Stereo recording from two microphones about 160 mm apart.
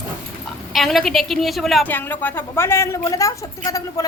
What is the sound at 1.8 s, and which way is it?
A woman's voice, 10° left (ahead or behind).